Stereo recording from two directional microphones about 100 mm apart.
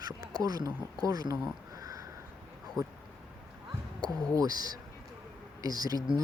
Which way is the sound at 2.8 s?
35° right (ahead or behind).